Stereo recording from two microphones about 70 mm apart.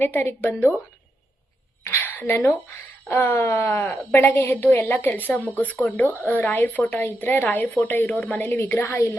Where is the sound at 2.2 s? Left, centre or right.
Left.